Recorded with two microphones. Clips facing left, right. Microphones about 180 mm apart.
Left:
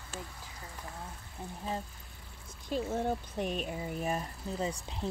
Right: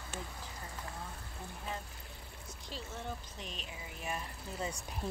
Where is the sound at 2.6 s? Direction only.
50° left (ahead or behind).